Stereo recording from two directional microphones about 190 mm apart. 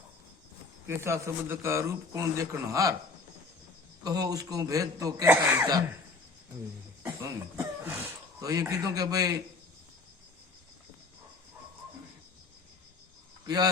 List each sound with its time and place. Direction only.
0.9 s a man's voice: 15° right (ahead or behind)
4.0 s a man's voice: 20° right (ahead or behind)
7.0 s speech: 15° right (ahead or behind)